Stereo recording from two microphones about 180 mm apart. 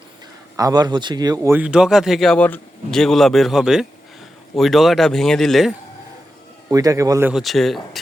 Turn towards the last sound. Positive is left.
turn(degrees=0)  # may be behind; listen again after turning